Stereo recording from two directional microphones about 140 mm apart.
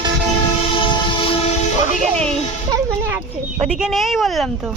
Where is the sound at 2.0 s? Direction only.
5° left (ahead or behind).